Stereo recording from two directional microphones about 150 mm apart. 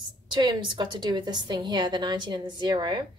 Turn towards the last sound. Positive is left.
turn(degrees=-30)  # may be behind; listen again after turning